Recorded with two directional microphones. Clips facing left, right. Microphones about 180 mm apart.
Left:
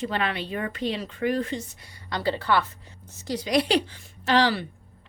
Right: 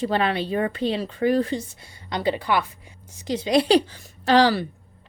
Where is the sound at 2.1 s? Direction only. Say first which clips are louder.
Right 1 dB; 15° right (ahead or behind).